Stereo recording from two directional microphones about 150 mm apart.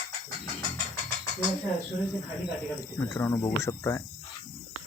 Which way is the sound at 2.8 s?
20° left (ahead or behind).